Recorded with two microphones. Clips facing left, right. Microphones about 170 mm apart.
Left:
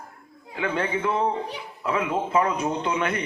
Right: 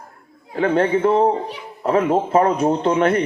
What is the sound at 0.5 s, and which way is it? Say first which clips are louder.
A man's voice: right 9 dB; 40° right (ahead or behind).